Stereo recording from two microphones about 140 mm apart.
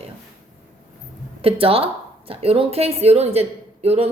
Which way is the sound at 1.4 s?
40° right (ahead or behind).